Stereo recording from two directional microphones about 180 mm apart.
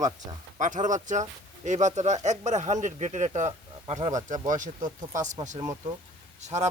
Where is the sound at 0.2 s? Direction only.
45° right (ahead or behind).